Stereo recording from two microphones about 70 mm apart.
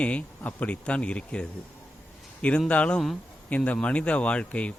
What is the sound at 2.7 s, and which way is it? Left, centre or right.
Speech, centre.